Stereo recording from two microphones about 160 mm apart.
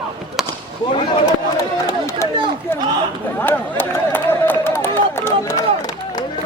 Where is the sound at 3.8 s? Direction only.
15° left (ahead or behind).